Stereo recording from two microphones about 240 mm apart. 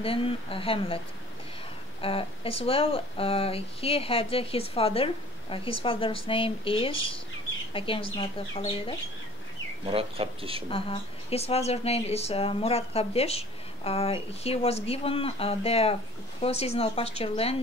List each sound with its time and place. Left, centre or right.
0.0 s speech: left
9.8 s speech: right
10.7 s speech: left